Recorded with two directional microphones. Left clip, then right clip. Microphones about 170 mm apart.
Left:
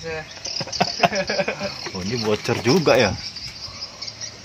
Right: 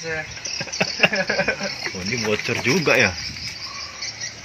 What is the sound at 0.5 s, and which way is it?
Cricket, 25° left (ahead or behind).